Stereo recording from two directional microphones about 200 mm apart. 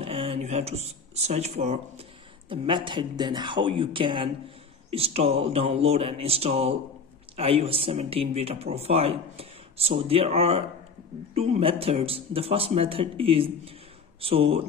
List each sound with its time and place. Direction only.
0.0 s speech: 25° right (ahead or behind)